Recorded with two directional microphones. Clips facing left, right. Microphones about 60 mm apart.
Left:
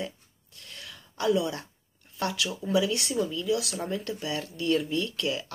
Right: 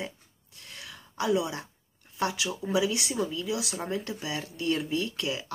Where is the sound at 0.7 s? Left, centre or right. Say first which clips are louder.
Even; right.